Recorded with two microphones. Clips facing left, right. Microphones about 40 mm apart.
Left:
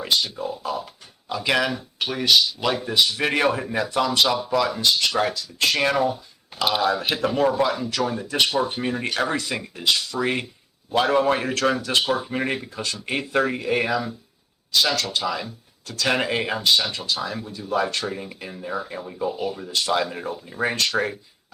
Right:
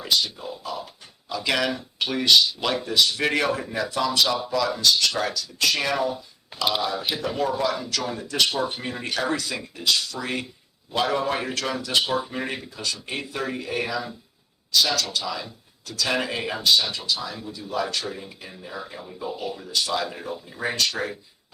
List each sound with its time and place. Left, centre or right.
0.1 s speech: left
1.5 s speech: centre
2.8 s speech: centre
5.5 s speech: left
6.7 s speech: left
7.6 s speech: left
8.8 s speech: left
11.0 s speech: left